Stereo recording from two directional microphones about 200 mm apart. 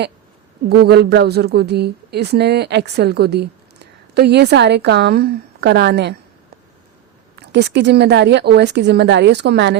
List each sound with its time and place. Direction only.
0.7 s speech: 55° right (ahead or behind)
7.3 s speech: 60° right (ahead or behind)